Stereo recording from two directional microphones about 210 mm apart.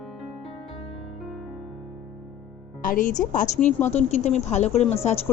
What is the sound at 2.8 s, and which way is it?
Speech, 40° left (ahead or behind).